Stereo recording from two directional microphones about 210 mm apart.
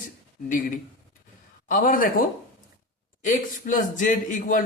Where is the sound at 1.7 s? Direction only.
40° left (ahead or behind).